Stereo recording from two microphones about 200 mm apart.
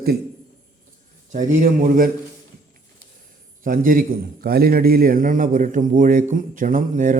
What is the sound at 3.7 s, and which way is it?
A man's voice, 45° right (ahead or behind).